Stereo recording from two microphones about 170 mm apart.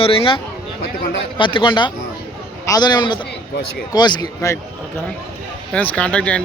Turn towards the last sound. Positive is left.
turn(degrees=5)  # may be behind; listen again after turning